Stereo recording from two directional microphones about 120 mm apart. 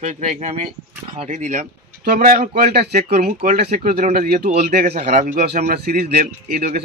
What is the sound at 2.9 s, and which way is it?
Speech, 75° right (ahead or behind).